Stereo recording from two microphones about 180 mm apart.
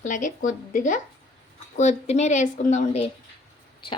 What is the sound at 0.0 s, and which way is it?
A woman's voice, 45° left (ahead or behind).